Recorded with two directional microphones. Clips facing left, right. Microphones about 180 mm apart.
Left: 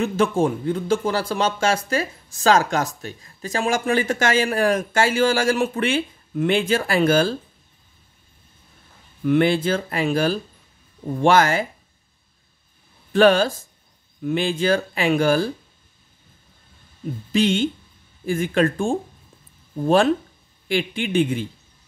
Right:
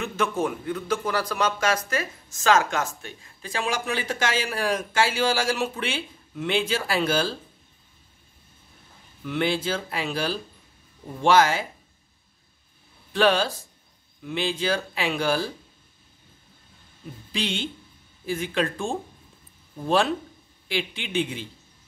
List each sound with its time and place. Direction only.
0.0 s a man's voice: 30° left (ahead or behind); by 7.3 s 50° left (ahead or behind)
9.2 s speech: 50° left (ahead or behind)
13.1 s speech: 50° left (ahead or behind)
17.3 s speech: 45° left (ahead or behind)